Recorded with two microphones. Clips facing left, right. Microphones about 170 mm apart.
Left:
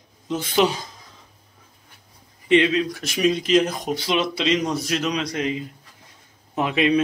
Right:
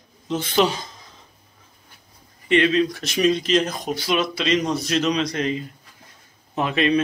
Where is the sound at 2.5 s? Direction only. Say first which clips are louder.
Even; 15° left (ahead or behind).